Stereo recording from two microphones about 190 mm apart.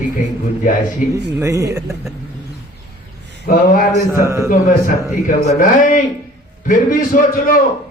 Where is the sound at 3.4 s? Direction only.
50° left (ahead or behind).